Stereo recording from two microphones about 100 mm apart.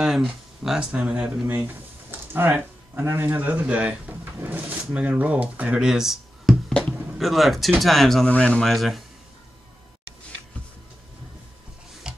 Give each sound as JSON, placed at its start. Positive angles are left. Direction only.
{"t": 0.0, "sound": "speech", "side_deg": -5}
{"t": 1.5, "sound": "speech", "side_deg": -20}
{"t": 12.1, "sound": "tick-tock", "side_deg": -10}